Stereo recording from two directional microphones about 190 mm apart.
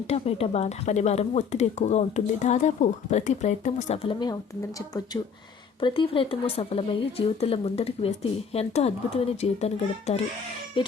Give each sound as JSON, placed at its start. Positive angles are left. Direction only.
{"t": 0.1, "sound": "speech", "side_deg": 30}
{"t": 5.8, "sound": "speech", "side_deg": 25}